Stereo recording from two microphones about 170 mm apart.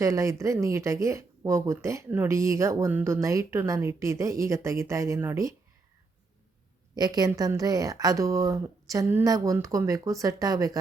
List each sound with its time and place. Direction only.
0.0 s speech: 20° right (ahead or behind)
6.9 s a woman's voice: 20° right (ahead or behind)